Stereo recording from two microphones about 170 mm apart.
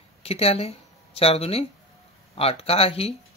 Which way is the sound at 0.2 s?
35° left (ahead or behind).